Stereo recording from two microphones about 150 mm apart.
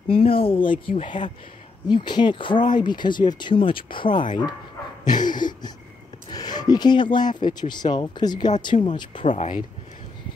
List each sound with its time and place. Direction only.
0.1 s speech: 40° left (ahead or behind)